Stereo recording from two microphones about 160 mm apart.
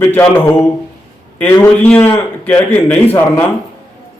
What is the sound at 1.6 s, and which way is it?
A man's voice, 10° left (ahead or behind).